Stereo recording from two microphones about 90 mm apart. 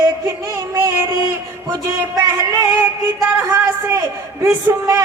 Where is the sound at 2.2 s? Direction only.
35° right (ahead or behind).